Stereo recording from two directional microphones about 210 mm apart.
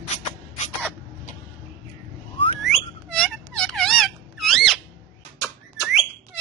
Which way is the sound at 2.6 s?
Centre (ahead or behind).